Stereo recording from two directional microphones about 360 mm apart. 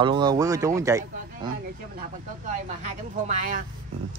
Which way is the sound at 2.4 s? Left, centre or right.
Centre.